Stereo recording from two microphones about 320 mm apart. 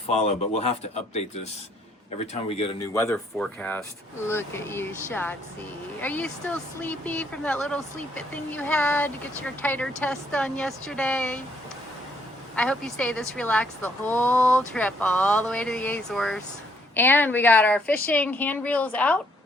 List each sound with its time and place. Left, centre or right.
0.1 s speech: centre
2.2 s speech: centre
2.9 s speech: centre
12.5 s speech: centre